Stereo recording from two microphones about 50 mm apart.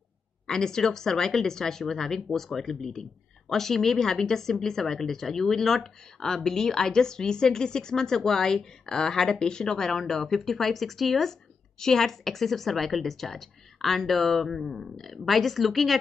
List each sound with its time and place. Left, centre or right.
0.5 s speech: centre